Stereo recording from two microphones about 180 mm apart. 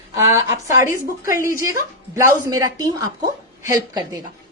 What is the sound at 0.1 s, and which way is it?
A woman's voice, 15° right (ahead or behind).